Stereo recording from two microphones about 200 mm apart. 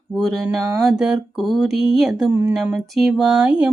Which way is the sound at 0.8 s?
Centre (ahead or behind).